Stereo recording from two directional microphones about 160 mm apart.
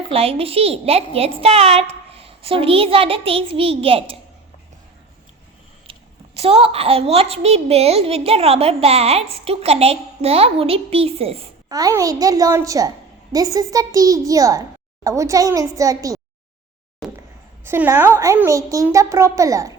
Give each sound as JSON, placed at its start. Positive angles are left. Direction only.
{"t": 0.1, "sound": "a woman's voice", "side_deg": -35}
{"t": 5.9, "sound": "a woman's voice", "side_deg": -35}
{"t": 11.7, "sound": "a child's voice", "side_deg": -20}
{"t": 17.0, "sound": "a sound", "side_deg": 0}
{"t": 17.7, "sound": "a woman's voice", "side_deg": -15}